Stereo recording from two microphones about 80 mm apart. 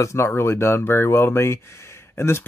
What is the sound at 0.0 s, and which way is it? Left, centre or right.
Speech, left.